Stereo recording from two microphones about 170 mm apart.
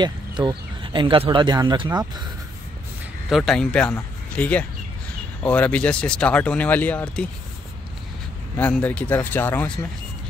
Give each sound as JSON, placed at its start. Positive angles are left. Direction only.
{"t": 0.0, "sound": "speech", "side_deg": -25}
{"t": 3.3, "sound": "speech", "side_deg": 0}
{"t": 8.5, "sound": "speech", "side_deg": 10}